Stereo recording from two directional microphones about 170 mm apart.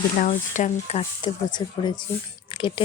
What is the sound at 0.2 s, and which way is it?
Speech, 45° left (ahead or behind).